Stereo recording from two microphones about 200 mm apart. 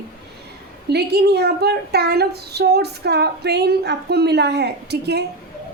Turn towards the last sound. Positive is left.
turn(degrees=-55)  # may be behind; listen again after turning